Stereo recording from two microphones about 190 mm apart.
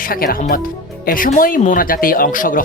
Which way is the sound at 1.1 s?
45° left (ahead or behind).